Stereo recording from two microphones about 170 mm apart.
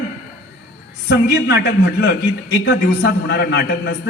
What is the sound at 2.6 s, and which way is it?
A man's voice, 90° left.